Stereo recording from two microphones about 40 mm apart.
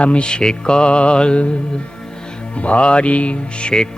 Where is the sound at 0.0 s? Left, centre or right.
Left.